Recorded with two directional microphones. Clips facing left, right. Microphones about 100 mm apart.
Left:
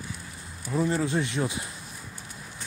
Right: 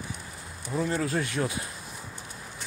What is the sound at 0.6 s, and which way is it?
Speech, 10° left (ahead or behind).